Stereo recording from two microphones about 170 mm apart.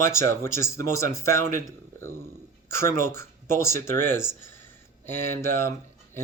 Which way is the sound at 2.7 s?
15° left (ahead or behind).